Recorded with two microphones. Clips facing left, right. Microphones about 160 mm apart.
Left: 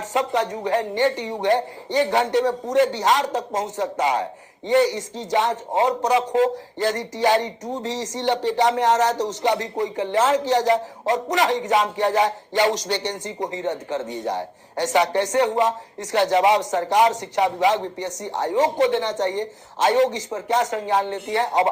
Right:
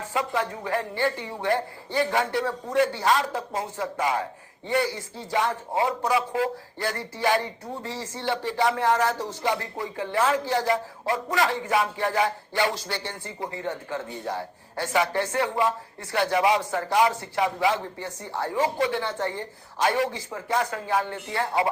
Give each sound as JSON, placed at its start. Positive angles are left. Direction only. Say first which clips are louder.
{"t": 0.0, "sound": "a man's voice", "louder": "left 5 dB", "side_deg": 20}